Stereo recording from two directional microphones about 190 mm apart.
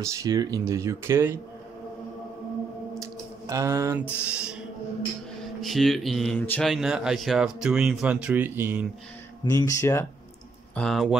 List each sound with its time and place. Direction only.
0.0 s speech: 20° right (ahead or behind)
3.0 s speech: 15° right (ahead or behind)
5.6 s speech: centre (ahead or behind)
9.4 s speech: 20° left (ahead or behind)
10.7 s speech: 5° left (ahead or behind)